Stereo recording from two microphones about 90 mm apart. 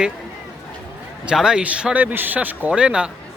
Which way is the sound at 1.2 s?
10° right (ahead or behind).